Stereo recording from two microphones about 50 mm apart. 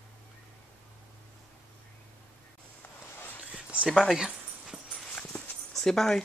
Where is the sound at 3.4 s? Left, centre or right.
Right.